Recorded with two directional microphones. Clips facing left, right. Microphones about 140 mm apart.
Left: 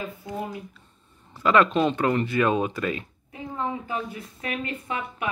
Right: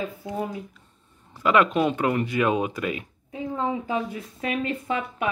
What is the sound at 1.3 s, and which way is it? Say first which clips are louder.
Speech: even; 10° right (ahead or behind).